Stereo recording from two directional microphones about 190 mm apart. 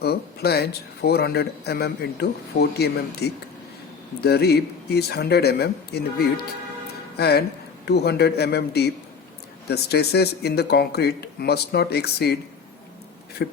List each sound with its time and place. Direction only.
0.0 s speech: 55° left (ahead or behind)
13.4 s speech: 60° left (ahead or behind)